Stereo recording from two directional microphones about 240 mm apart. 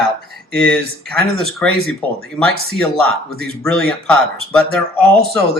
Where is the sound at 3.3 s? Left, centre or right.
Right.